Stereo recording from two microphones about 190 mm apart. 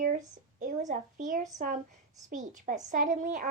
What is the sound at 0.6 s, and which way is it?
Speech, 40° right (ahead or behind).